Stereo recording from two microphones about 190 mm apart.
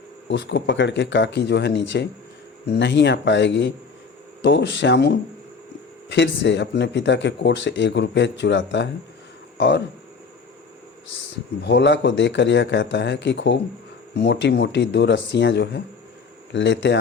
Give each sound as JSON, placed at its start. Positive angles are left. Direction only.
{"t": 0.3, "sound": "speech", "side_deg": 65}
{"t": 11.6, "sound": "speech", "side_deg": 65}